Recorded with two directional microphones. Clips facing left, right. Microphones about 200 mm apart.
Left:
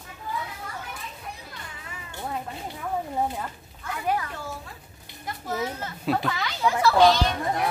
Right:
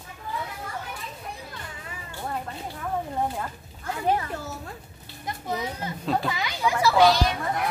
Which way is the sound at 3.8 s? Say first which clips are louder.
Right 2 dB; 30° right (ahead or behind).